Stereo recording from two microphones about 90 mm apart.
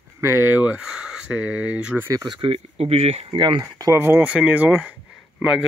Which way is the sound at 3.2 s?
60° right (ahead or behind).